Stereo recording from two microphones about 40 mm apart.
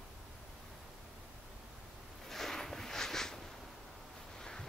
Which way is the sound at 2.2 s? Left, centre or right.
Centre.